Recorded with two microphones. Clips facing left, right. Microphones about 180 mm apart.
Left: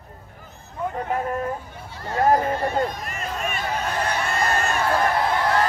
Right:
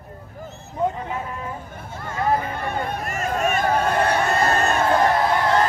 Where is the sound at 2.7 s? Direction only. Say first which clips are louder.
Left 1 dB; 55° right (ahead or behind).